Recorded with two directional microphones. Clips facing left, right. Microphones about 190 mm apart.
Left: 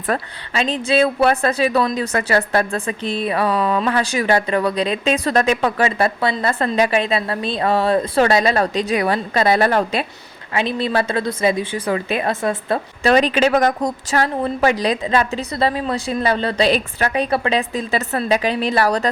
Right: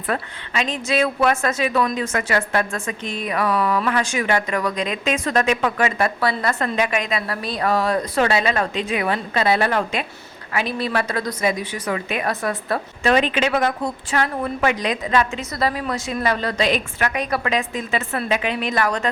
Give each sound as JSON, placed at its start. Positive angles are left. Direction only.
{"t": 0.1, "sound": "a woman's voice", "side_deg": 35}
{"t": 10.5, "sound": "a woman's voice", "side_deg": 25}